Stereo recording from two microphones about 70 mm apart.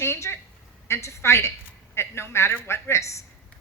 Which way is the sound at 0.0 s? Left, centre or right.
Left.